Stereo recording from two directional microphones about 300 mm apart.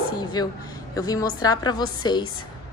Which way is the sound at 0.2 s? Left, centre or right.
Centre.